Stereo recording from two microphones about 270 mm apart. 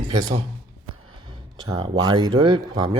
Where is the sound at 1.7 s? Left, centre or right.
Centre.